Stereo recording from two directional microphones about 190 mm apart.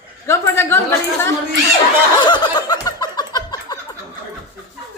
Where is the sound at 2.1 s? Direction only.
25° left (ahead or behind).